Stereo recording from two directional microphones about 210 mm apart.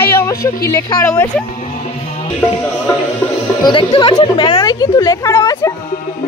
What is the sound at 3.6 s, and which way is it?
Speech, 25° left (ahead or behind).